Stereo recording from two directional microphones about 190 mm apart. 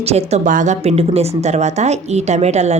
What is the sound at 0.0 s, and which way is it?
Speech, 35° right (ahead or behind).